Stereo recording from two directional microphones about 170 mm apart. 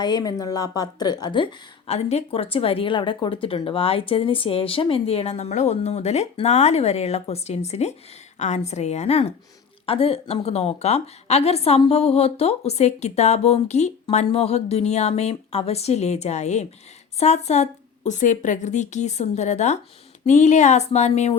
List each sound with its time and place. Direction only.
0.0 s a woman's voice: 25° left (ahead or behind)
1.9 s a woman's voice: 40° left (ahead or behind)